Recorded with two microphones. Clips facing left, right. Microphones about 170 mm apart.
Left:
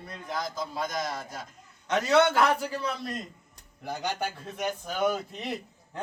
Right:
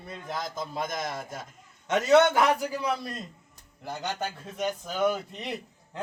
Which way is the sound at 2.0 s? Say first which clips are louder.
Right 2 dB; 20° right (ahead or behind).